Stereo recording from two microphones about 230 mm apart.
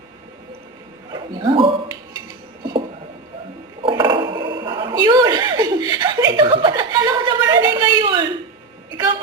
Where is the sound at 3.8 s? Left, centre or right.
Centre.